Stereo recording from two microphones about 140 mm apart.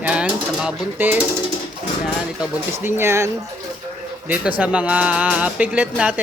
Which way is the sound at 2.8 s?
15° right (ahead or behind).